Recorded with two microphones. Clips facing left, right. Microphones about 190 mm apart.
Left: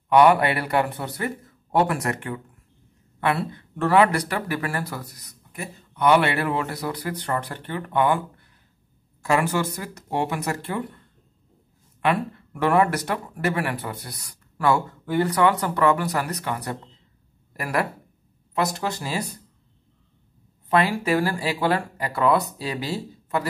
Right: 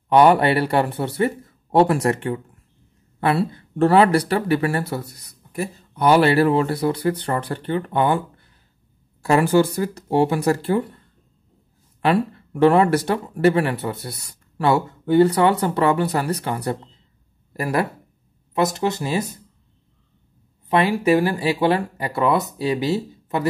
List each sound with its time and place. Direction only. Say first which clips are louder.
0.1 s speech: right 2 dB; 30° right (ahead or behind)
9.2 s speech: right 6 dB; 30° right (ahead or behind)
12.0 s speech: right 4 dB; 30° right (ahead or behind)
20.6 s speech: right 4 dB; 20° right (ahead or behind)